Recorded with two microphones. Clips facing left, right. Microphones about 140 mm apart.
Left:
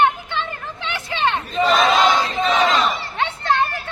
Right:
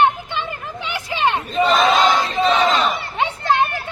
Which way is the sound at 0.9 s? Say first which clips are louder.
Right 1 dB; 10° right (ahead or behind).